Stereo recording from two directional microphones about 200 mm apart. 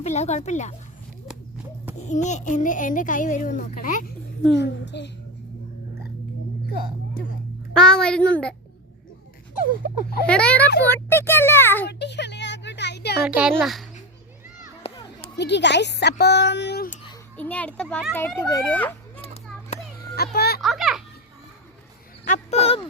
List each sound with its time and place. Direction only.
0.0 s a child's voice: 35° left (ahead or behind)
2.0 s a child's voice: 35° left (ahead or behind)
4.5 s speech: 60° left (ahead or behind)
7.7 s a woman's voice: 5° left (ahead or behind)
10.2 s a woman's voice: 5° left (ahead or behind)
11.9 s a sound: 55° left (ahead or behind)
13.2 s a woman's voice: 5° right (ahead or behind)
14.8 s children playing: 25° left (ahead or behind)
15.4 s speech: 60° left (ahead or behind)
17.3 s a child's voice: 5° left (ahead or behind)
18.7 s a sound: 10° left (ahead or behind)
20.1 s a child's voice: 50° left (ahead or behind)
20.6 s a child's voice: centre (ahead or behind)
22.3 s a sound: 30° left (ahead or behind)